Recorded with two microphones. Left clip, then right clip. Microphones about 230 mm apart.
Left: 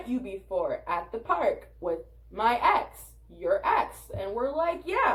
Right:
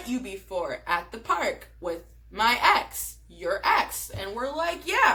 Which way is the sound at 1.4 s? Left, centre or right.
Right.